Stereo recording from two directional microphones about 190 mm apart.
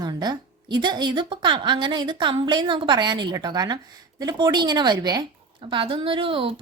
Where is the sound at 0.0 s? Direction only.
20° right (ahead or behind).